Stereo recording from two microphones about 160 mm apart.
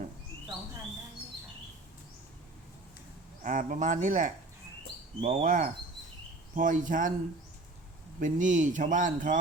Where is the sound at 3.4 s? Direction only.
55° right (ahead or behind).